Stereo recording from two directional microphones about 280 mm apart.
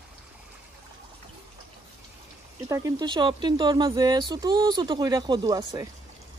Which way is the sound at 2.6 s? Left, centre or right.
Centre.